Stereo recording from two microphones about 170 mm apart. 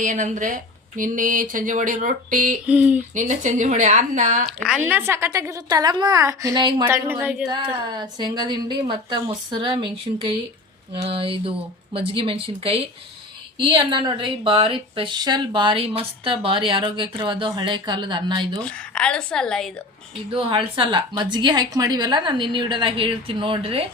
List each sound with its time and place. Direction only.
0.0 s speech: 50° right (ahead or behind)
2.6 s speech: 10° right (ahead or behind)
3.2 s speech: 45° right (ahead or behind)
4.6 s a woman's voice: 5° right (ahead or behind)
7.9 s a woman's voice: 25° right (ahead or behind)
18.6 s a woman's voice: 5° left (ahead or behind)
20.3 s a woman's voice: 30° right (ahead or behind)